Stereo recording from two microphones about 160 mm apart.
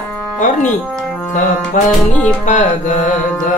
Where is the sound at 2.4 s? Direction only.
50° left (ahead or behind).